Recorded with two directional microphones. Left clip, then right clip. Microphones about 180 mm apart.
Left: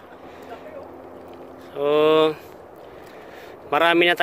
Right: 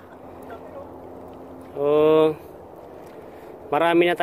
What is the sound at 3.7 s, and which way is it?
Speech, 5° right (ahead or behind).